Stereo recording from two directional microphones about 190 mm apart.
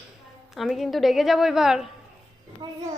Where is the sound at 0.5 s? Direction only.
Centre (ahead or behind).